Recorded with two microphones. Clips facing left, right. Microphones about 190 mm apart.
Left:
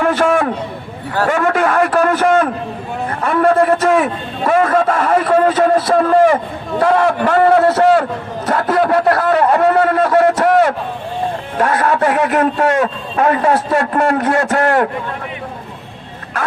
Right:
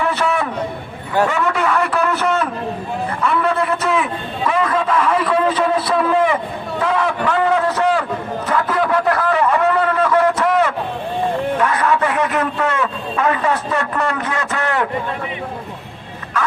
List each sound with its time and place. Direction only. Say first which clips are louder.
0.0 s a sound: left 5 dB; 50° left (ahead or behind)
3.1 s a man's voice: left 6 dB; 45° left (ahead or behind)
7.6 s a man's voice: left 6 dB; 75° left (ahead or behind)
8.4 s a man's voice: left 3 dB; 45° left (ahead or behind)
8.8 s a sound: left 5 dB; 45° left (ahead or behind)
11.5 s a man's voice: left 6 dB; 40° left (ahead or behind)